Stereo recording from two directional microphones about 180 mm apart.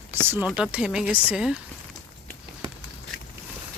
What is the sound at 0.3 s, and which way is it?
Speech, 5° right (ahead or behind).